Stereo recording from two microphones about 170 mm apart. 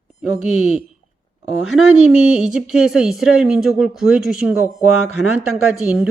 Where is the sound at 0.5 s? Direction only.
5° right (ahead or behind).